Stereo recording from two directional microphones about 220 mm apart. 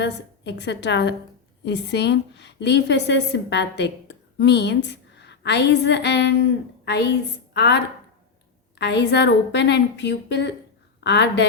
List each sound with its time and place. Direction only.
0.0 s a woman's voice: 50° left (ahead or behind)
8.8 s a woman's voice: 50° left (ahead or behind)